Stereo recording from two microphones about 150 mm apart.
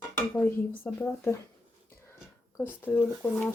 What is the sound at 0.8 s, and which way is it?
Speech, 15° left (ahead or behind).